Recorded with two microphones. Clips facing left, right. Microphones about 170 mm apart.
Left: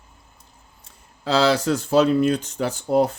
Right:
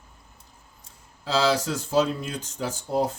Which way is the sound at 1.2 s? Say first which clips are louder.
Left 4 dB; 65° left (ahead or behind).